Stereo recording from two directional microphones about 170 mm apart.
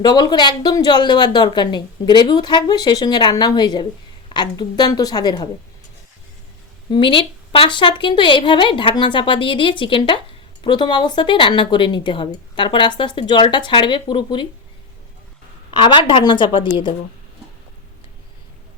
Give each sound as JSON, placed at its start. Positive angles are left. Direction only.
{"t": 0.0, "sound": "speech", "side_deg": 25}
{"t": 6.9, "sound": "speech", "side_deg": 30}
{"t": 15.8, "sound": "speech", "side_deg": 30}